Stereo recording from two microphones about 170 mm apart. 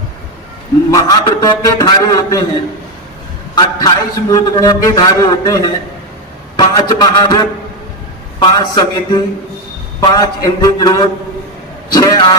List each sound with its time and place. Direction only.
0.9 s a man's voice: 20° left (ahead or behind)
3.5 s a man's voice: 25° left (ahead or behind)